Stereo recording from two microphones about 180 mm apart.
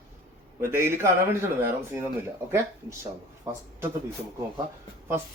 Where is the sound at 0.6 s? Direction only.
15° right (ahead or behind).